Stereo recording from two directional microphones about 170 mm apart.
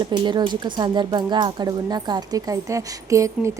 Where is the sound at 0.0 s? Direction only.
25° right (ahead or behind).